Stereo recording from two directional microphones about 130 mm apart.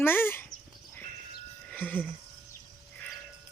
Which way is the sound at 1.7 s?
15° left (ahead or behind).